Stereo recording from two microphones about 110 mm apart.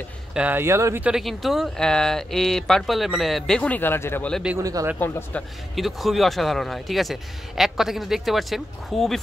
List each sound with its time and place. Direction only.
0.3 s speech: 10° right (ahead or behind)
0.6 s speech: 25° right (ahead or behind)
1.0 s speech: centre (ahead or behind); by 4.3 s 20° left (ahead or behind)
4.6 s speech: 30° right (ahead or behind)
4.9 s speech: 15° left (ahead or behind)
5.8 s speech: centre (ahead or behind)